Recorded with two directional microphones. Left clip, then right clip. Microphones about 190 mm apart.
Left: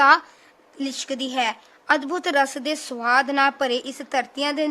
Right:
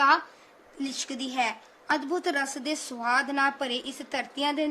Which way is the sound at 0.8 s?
35° left (ahead or behind).